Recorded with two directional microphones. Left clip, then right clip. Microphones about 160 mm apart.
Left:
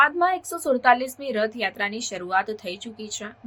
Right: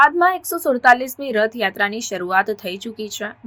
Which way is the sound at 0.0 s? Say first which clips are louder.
Right 5 dB; 20° right (ahead or behind).